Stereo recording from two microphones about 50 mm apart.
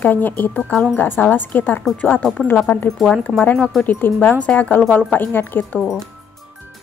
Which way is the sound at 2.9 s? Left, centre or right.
Centre.